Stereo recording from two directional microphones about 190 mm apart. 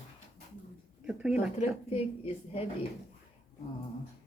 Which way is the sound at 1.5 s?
35° left (ahead or behind).